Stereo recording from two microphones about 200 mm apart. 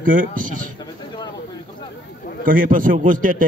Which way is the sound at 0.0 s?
45° right (ahead or behind).